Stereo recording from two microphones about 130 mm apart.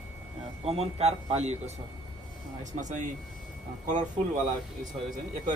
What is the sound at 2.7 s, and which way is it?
Speech, 70° right (ahead or behind).